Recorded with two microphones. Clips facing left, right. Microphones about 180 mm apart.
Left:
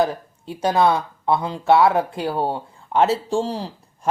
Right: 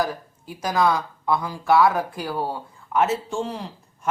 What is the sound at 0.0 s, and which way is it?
Speech, 25° left (ahead or behind).